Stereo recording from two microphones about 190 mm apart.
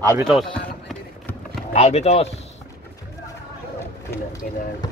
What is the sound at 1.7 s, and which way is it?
Speech, 35° left (ahead or behind).